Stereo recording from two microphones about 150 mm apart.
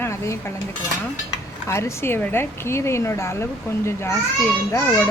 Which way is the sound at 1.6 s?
20° left (ahead or behind).